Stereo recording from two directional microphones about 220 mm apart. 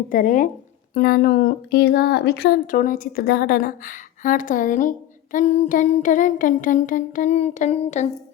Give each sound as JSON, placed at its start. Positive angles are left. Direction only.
{"t": 0.1, "sound": "speech", "side_deg": 40}